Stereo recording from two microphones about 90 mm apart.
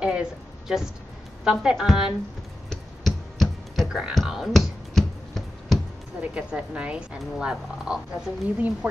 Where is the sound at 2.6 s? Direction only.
5° left (ahead or behind).